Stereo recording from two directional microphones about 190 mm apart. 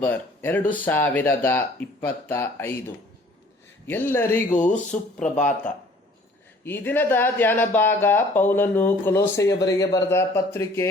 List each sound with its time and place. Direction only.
0.0 s speech: 10° left (ahead or behind)
4.5 s speech: 40° left (ahead or behind)
6.7 s speech: 10° left (ahead or behind)